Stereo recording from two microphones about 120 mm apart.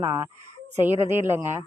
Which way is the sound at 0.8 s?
20° right (ahead or behind).